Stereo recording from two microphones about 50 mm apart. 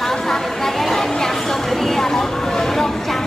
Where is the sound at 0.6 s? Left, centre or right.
Centre.